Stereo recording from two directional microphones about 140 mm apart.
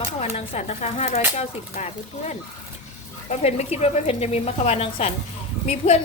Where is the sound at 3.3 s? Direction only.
50° left (ahead or behind).